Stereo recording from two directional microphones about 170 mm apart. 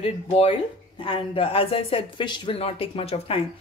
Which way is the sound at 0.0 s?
35° left (ahead or behind).